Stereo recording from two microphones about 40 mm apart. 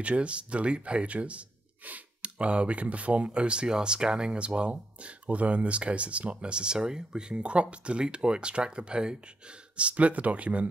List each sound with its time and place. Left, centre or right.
0.0 s speech: right
9.8 s speech: right